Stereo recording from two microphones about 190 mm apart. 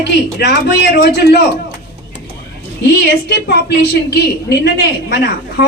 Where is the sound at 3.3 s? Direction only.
60° left (ahead or behind).